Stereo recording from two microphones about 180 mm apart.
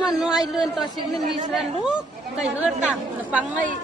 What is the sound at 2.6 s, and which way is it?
Speech, 5° right (ahead or behind).